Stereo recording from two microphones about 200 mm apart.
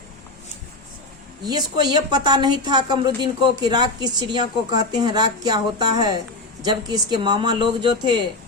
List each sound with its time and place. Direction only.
1.5 s a woman's voice: 20° right (ahead or behind)